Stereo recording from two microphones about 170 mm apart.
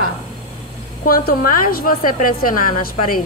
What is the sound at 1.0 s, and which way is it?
A woman's voice, 60° left (ahead or behind).